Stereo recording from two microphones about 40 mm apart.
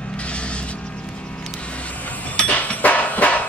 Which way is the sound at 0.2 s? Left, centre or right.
Left.